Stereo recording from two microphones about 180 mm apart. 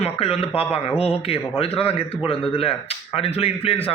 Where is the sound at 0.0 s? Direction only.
35° left (ahead or behind).